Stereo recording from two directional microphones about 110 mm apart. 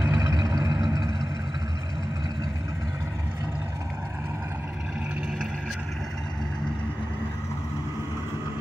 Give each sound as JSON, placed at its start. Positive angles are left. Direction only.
{"t": 0.0, "sound": "vehicle", "side_deg": -25}